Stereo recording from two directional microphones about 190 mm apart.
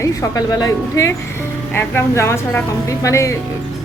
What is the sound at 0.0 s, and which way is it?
A woman's voice, 15° left (ahead or behind).